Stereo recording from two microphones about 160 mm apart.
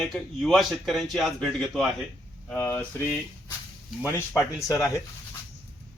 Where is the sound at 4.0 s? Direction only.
15° left (ahead or behind).